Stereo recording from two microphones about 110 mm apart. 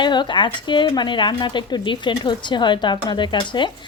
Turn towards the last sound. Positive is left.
turn(degrees=45)  # may be behind; listen again after turning